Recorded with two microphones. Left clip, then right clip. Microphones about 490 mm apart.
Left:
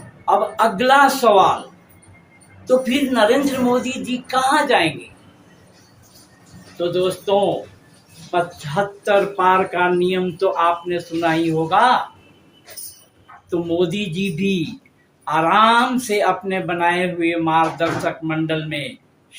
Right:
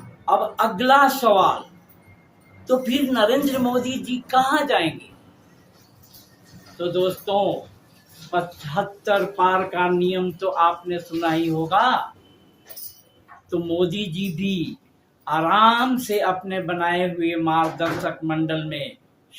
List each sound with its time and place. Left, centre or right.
0.3 s speech: right
2.6 s speech: right
6.7 s speech: right
13.5 s speech: right